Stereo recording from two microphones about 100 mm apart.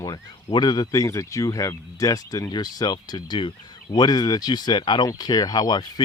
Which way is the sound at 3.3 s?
50° left (ahead or behind).